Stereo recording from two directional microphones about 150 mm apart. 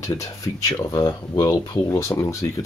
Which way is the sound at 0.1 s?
25° left (ahead or behind).